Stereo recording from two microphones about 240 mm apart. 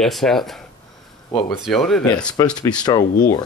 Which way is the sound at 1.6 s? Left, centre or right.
Centre.